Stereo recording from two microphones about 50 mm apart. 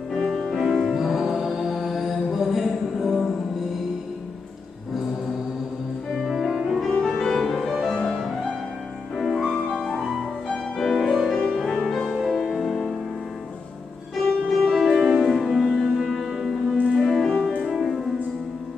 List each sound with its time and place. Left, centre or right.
0.1 s music: centre
0.6 s music: centre
6.1 s music: centre
7.0 s music: centre
14.1 s music: centre
15.0 s music: centre
15.2 s music: centre
17.4 s music: centre
17.6 s music: centre